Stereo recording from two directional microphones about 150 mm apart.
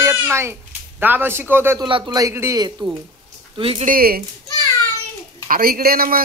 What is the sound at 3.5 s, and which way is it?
Speech, 40° right (ahead or behind).